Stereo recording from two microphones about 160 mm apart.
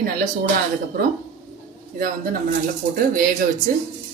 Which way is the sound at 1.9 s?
60° right (ahead or behind).